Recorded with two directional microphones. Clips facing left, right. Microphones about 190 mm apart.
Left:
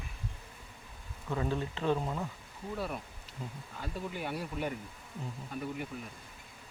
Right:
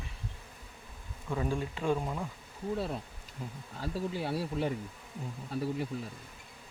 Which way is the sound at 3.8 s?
30° right (ahead or behind).